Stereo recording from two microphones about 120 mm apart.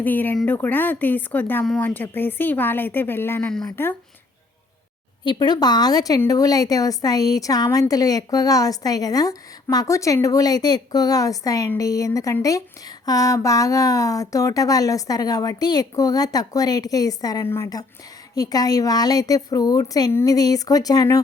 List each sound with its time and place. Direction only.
0.0 s speech: 15° left (ahead or behind)
5.2 s speech: 40° left (ahead or behind)
17.4 s speech: 20° left (ahead or behind)
18.3 s speech: 30° left (ahead or behind)